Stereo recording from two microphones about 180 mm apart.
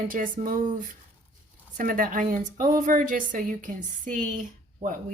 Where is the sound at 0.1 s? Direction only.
50° right (ahead or behind).